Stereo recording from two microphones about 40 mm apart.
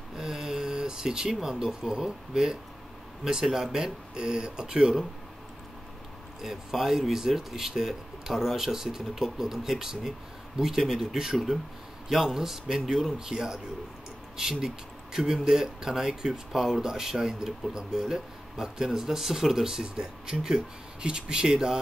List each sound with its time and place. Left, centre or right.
0.2 s a sound: centre
1.3 s speech: centre
6.4 s speech: centre